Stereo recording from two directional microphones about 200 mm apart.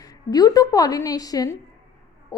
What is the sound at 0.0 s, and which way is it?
A woman's voice, 20° left (ahead or behind).